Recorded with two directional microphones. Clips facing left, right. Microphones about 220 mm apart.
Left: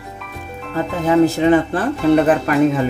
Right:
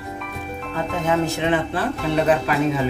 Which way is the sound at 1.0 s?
35° left (ahead or behind).